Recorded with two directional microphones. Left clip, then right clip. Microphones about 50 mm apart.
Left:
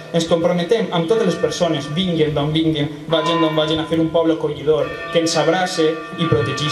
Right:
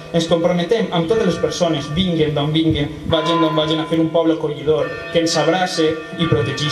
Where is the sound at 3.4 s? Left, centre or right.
Centre.